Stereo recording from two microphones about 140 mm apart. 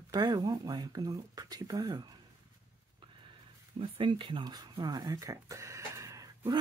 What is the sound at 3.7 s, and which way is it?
Speech, 40° right (ahead or behind).